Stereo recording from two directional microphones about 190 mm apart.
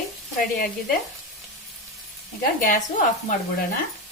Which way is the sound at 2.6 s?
45° left (ahead or behind).